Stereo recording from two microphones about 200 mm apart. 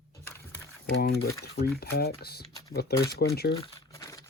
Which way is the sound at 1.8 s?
50° left (ahead or behind).